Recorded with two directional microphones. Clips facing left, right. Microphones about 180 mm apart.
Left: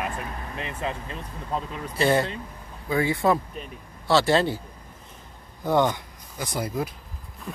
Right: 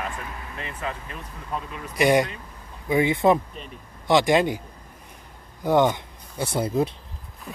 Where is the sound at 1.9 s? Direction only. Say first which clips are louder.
Right 3 dB; 15° right (ahead or behind).